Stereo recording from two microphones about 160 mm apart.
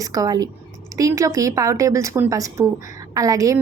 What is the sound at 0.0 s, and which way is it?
A woman's voice, 20° right (ahead or behind).